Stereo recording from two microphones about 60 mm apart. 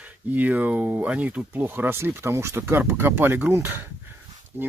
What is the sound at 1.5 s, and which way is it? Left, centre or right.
Speech, right.